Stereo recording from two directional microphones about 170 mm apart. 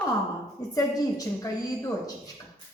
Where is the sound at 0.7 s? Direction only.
20° left (ahead or behind).